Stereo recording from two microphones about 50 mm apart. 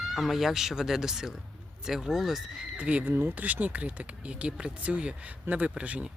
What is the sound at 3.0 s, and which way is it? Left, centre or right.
Speech, right.